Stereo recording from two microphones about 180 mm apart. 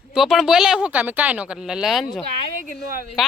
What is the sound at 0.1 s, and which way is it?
Speech, centre (ahead or behind).